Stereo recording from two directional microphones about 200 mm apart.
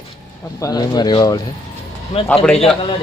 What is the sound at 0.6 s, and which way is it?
Speech, 20° left (ahead or behind).